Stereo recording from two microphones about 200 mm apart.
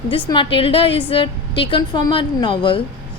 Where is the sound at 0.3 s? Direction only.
25° left (ahead or behind).